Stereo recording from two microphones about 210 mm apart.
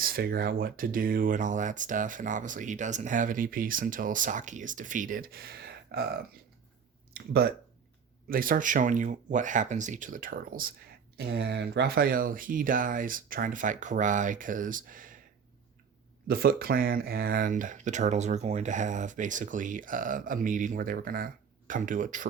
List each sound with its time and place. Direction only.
0.0 s speech: 45° right (ahead or behind)
8.3 s speech: 40° right (ahead or behind)
16.2 s speech: 45° right (ahead or behind)